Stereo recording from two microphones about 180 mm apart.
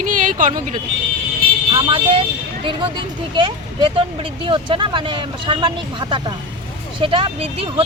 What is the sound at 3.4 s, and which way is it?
Speech, 30° right (ahead or behind).